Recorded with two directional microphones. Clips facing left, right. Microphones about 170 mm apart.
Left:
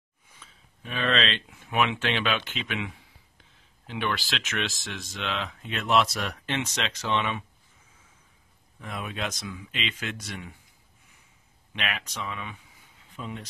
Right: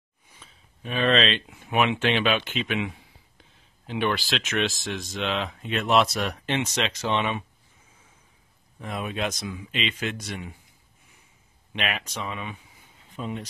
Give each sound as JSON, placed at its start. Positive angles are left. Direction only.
{"t": 0.4, "sound": "speech", "side_deg": -25}
{"t": 8.8, "sound": "speech", "side_deg": -25}
{"t": 11.7, "sound": "speech", "side_deg": -20}